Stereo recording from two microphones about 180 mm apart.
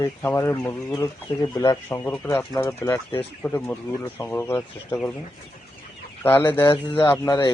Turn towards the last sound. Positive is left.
turn(degrees=20)  # may be behind; listen again after turning